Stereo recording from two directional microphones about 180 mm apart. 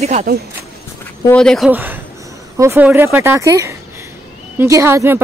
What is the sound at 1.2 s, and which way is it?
Speech, 5° left (ahead or behind).